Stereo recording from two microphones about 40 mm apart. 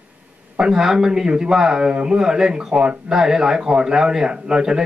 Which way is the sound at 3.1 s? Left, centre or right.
Centre.